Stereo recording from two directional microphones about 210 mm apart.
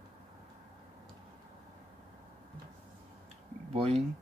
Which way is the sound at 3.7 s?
30° right (ahead or behind).